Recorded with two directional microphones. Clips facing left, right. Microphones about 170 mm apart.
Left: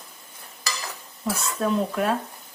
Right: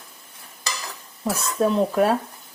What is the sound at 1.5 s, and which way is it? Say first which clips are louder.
Speech: right 6 dB; 35° right (ahead or behind).